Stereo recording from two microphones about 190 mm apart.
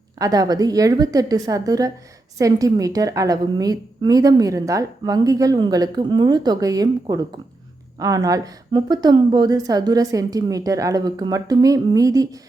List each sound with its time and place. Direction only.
0.2 s a woman's voice: 20° right (ahead or behind)